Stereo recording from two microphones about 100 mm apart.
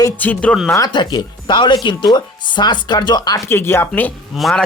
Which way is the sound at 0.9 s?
50° left (ahead or behind).